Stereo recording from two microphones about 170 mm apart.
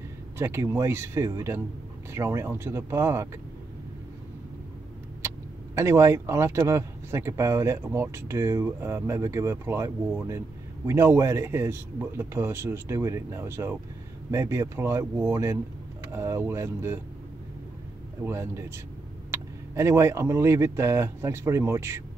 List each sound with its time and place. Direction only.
0.4 s speech: 15° right (ahead or behind)
5.2 s vehicle: 15° right (ahead or behind)
5.8 s speech: 15° right (ahead or behind)
18.2 s speech: 15° right (ahead or behind)